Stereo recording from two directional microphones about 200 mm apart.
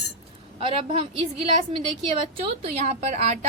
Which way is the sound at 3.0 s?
35° right (ahead or behind).